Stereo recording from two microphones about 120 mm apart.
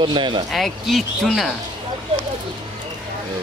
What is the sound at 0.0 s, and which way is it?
Speech, 40° right (ahead or behind).